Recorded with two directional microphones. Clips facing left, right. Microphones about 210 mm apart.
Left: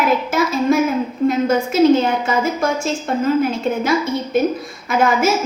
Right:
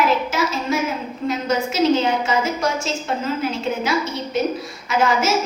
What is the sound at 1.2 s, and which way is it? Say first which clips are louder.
A woman's voice: left 5 dB; 50° left (ahead or behind).